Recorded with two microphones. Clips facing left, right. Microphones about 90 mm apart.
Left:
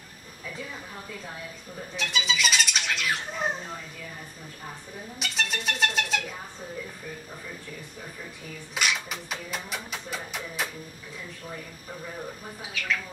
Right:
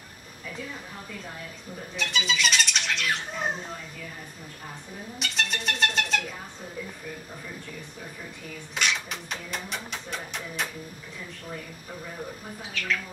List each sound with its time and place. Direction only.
2.0 s speech: centre (ahead or behind)
5.2 s music: centre (ahead or behind)
8.7 s speech: 5° left (ahead or behind)
12.7 s speech: 5° left (ahead or behind)